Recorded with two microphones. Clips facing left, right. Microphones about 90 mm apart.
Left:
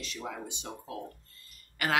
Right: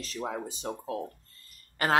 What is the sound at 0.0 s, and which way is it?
Speech, 35° right (ahead or behind).